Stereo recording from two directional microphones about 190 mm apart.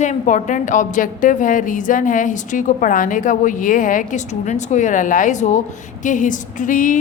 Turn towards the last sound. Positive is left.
turn(degrees=45)  # may be behind; listen again after turning